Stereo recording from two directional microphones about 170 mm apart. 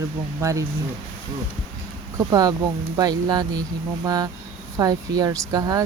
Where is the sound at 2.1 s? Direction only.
20° right (ahead or behind).